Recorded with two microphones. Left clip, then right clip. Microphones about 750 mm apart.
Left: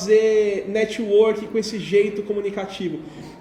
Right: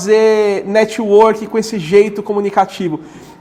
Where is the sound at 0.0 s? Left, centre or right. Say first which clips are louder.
Right 6 dB; right.